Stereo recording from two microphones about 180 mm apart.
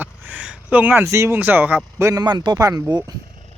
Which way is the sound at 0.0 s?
10° right (ahead or behind).